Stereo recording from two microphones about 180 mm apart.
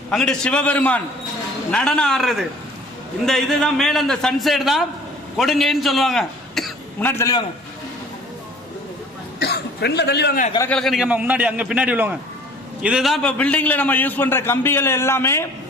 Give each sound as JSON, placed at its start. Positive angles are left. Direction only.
{"t": 0.1, "sound": "a man's voice", "side_deg": 5}
{"t": 7.0, "sound": "a man's voice", "side_deg": 15}
{"t": 9.4, "sound": "a sound", "side_deg": 65}
{"t": 10.7, "sound": "a man's voice", "side_deg": 0}